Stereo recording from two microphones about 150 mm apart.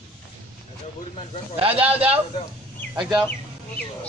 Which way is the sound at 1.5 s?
40° right (ahead or behind).